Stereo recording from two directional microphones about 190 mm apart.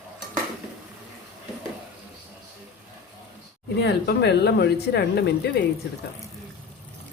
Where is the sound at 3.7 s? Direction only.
65° left (ahead or behind).